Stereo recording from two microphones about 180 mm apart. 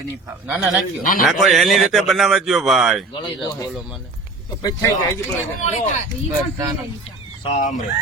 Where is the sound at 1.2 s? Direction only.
Centre (ahead or behind).